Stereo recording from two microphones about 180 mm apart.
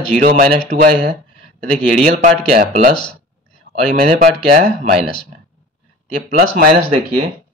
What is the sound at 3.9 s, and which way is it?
Speech, 55° right (ahead or behind).